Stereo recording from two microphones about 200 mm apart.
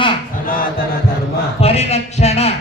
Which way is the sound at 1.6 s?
30° left (ahead or behind).